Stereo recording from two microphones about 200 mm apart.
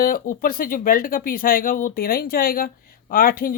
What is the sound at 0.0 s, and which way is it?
Speech, 45° left (ahead or behind).